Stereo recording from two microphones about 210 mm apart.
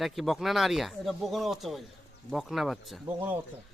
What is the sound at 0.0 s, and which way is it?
Speech, centre (ahead or behind).